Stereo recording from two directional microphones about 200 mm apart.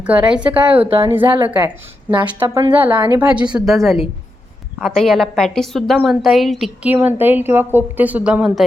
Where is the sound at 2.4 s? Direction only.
25° right (ahead or behind).